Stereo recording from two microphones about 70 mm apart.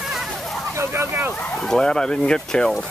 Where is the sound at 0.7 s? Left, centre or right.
Right.